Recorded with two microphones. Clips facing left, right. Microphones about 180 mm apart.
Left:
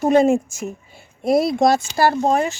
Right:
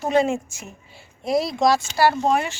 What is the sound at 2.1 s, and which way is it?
Speech, 40° left (ahead or behind).